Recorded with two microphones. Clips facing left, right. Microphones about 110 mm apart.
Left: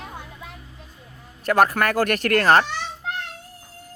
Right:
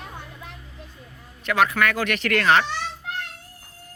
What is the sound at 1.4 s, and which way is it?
Speech, 40° left (ahead or behind).